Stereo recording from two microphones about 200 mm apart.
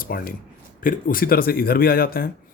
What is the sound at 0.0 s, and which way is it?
Speech, 45° left (ahead or behind).